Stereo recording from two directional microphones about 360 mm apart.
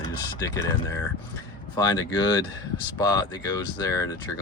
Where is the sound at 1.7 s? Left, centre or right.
Centre.